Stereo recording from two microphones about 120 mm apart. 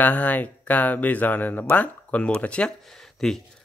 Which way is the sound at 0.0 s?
15° left (ahead or behind).